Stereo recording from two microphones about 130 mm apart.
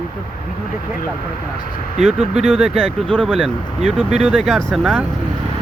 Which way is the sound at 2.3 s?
50° right (ahead or behind).